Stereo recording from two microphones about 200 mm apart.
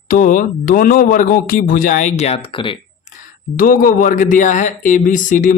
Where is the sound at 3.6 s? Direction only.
45° left (ahead or behind).